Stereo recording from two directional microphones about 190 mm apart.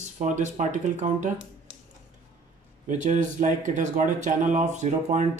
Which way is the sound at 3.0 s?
40° right (ahead or behind).